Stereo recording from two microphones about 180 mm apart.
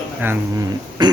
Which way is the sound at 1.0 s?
25° right (ahead or behind).